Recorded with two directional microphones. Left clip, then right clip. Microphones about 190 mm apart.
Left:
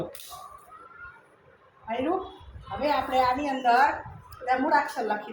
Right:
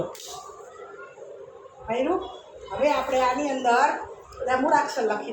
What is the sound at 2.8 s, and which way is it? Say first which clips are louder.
A woman's voice: right 2 dB; 30° left (ahead or behind).